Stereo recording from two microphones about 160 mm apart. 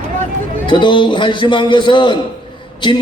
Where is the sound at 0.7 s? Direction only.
30° left (ahead or behind).